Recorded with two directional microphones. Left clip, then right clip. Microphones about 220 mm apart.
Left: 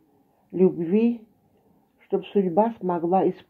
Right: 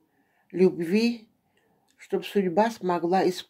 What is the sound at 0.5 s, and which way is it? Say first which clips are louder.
Speech: left 1 dB; 10° right (ahead or behind).